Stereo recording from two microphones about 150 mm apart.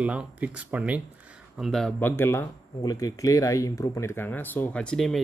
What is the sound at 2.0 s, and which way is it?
Speech, 15° left (ahead or behind).